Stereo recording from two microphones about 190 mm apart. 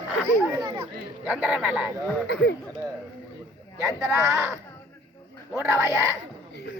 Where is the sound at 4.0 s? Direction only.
15° right (ahead or behind).